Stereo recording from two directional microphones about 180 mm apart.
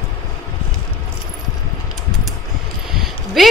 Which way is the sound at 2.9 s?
Centre (ahead or behind).